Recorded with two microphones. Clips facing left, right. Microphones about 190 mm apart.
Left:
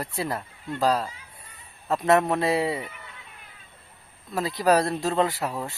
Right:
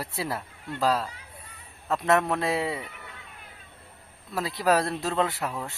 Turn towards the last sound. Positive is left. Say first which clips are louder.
# left 3 dB
turn(degrees=0)  # may be behind; listen again after turning